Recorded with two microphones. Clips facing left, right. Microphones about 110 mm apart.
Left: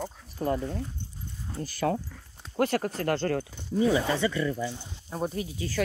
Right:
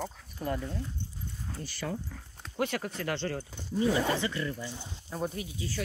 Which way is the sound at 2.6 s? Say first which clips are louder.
Left 6 dB; 40° left (ahead or behind).